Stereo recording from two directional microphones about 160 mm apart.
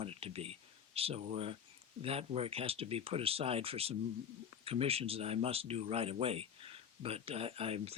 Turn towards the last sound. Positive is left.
turn(degrees=-40)  # may be behind; listen again after turning